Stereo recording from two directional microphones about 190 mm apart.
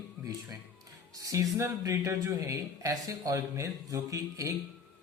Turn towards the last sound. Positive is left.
turn(degrees=-15)  # may be behind; listen again after turning